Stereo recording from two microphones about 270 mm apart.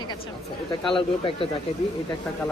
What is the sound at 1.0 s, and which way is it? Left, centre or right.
Speech, centre.